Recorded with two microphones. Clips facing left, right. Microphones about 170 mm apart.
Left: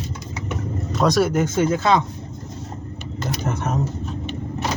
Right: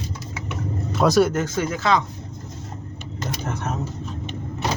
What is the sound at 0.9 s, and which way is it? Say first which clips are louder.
Speech: right 1 dB; centre (ahead or behind).